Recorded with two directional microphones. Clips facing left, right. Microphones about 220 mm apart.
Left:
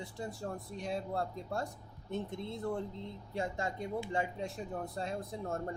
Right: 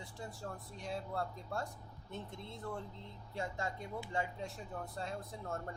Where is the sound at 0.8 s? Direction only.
20° left (ahead or behind).